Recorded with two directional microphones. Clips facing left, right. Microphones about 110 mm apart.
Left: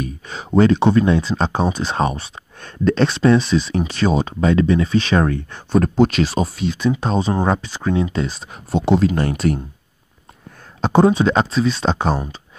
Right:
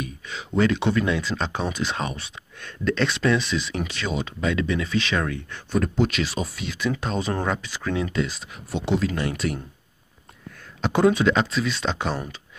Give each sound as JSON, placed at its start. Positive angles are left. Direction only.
{"t": 0.0, "sound": "speech", "side_deg": 40}
{"t": 10.8, "sound": "speech", "side_deg": 30}